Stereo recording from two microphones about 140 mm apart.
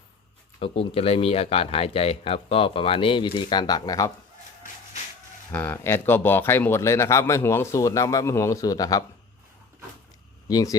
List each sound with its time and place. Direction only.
0.6 s speech: 40° left (ahead or behind)
5.5 s speech: 15° left (ahead or behind)
10.5 s speech: 25° left (ahead or behind)